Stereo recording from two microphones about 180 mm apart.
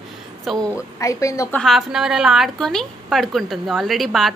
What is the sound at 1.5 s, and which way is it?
Speech, centre (ahead or behind).